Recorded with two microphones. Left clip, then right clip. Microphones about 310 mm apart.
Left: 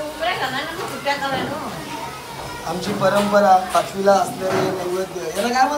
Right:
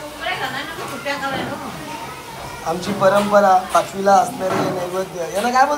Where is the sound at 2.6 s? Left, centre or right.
Centre.